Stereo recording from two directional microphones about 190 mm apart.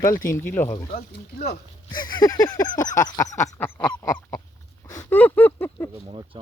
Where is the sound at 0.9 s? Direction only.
55° left (ahead or behind).